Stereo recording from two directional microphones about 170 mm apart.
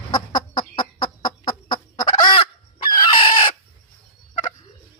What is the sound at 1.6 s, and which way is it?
Chicken, 25° left (ahead or behind).